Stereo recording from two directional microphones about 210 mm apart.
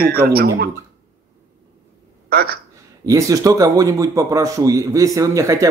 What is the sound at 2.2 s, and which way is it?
Speech, 45° right (ahead or behind).